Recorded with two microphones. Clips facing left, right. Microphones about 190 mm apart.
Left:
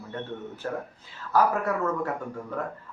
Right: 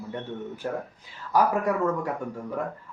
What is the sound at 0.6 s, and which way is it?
Speech, 15° right (ahead or behind).